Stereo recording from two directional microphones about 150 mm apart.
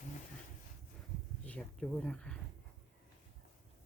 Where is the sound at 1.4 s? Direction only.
5° left (ahead or behind).